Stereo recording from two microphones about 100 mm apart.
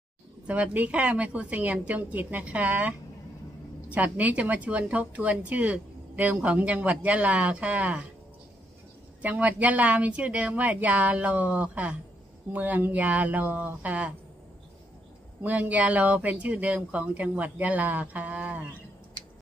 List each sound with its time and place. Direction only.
0.5 s speech: 15° right (ahead or behind)
3.9 s speech: 15° right (ahead or behind)
9.2 s speech: 15° right (ahead or behind)
15.4 s speech: 15° right (ahead or behind)